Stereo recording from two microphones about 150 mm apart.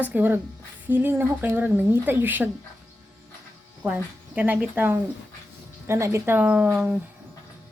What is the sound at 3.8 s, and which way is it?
Speech, 10° right (ahead or behind).